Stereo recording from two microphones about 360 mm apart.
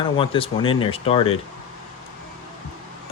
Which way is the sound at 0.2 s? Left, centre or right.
Centre.